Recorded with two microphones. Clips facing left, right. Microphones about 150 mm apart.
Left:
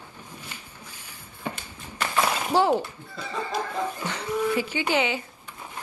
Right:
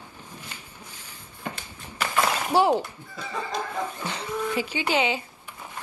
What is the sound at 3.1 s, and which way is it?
Snicker, 10° left (ahead or behind).